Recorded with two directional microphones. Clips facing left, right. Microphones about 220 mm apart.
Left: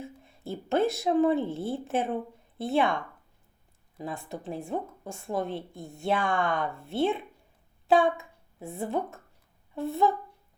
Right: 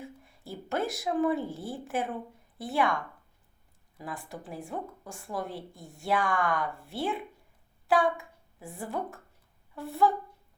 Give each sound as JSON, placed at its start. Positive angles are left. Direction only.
{"t": 0.0, "sound": "a woman's voice", "side_deg": 25}